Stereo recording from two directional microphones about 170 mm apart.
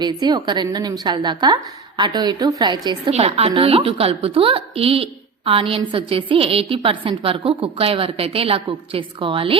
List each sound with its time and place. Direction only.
0.0 s a woman's voice: 25° right (ahead or behind)